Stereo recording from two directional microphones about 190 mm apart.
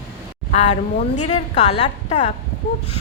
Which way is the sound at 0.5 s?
35° left (ahead or behind).